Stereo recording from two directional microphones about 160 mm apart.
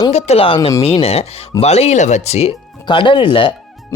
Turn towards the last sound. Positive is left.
turn(degrees=30)  # may be behind; listen again after turning